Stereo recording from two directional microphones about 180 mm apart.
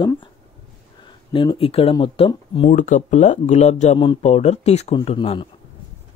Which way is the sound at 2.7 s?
45° left (ahead or behind).